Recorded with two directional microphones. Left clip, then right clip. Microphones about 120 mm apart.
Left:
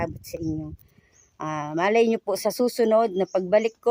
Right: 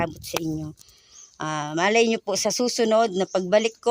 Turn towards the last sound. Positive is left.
turn(degrees=0)  # may be behind; listen again after turning